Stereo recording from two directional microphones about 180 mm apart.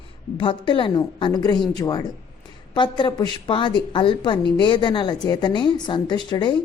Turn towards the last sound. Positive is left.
turn(degrees=25)  # may be behind; listen again after turning